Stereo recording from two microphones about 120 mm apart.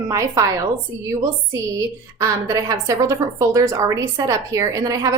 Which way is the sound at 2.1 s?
25° right (ahead or behind).